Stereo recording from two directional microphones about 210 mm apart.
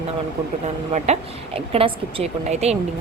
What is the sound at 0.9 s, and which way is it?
A woman's voice, 30° right (ahead or behind).